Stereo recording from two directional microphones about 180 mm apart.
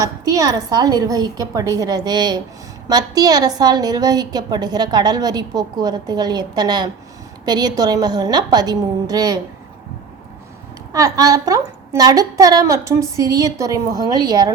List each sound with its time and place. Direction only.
0.3 s a woman's voice: 20° right (ahead or behind)
10.9 s a woman's voice: 20° right (ahead or behind)